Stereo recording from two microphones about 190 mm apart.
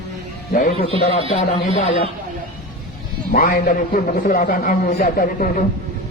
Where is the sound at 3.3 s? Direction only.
45° left (ahead or behind).